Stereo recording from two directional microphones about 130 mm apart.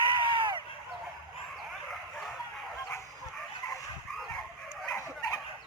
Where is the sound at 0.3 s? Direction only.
40° right (ahead or behind).